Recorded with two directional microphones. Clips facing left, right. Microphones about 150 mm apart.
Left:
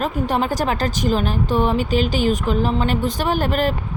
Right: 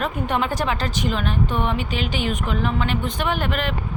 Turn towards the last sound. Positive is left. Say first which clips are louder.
# left 5 dB
turn(degrees=40)  # may be behind; listen again after turning